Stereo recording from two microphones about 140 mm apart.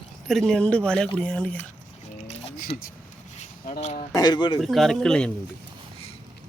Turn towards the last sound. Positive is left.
turn(degrees=5)  # may be behind; listen again after turning